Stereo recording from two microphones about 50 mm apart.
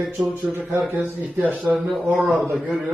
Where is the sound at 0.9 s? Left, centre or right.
Right.